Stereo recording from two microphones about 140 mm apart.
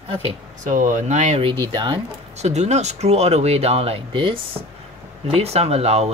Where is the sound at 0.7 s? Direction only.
60° right (ahead or behind).